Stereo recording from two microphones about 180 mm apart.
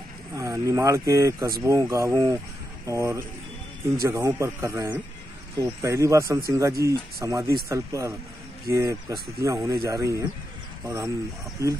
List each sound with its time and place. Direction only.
0.4 s speech: 15° right (ahead or behind)
11.6 s speech: 15° right (ahead or behind)